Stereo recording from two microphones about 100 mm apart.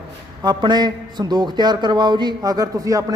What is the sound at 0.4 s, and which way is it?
A man's voice, 45° right (ahead or behind).